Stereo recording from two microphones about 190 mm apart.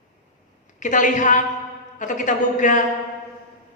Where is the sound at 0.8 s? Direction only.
40° left (ahead or behind).